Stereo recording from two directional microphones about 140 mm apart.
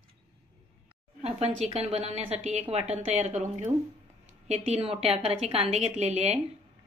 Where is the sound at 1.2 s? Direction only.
50° right (ahead or behind).